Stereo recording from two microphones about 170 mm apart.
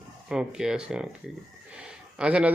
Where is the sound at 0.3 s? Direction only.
5° right (ahead or behind).